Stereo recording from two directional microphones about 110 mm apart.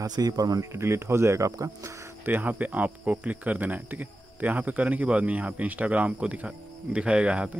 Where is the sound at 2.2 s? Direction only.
15° right (ahead or behind).